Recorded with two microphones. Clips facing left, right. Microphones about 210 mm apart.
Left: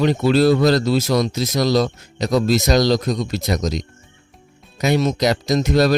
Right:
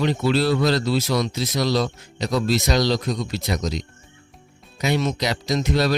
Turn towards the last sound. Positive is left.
turn(degrees=45)  # may be behind; listen again after turning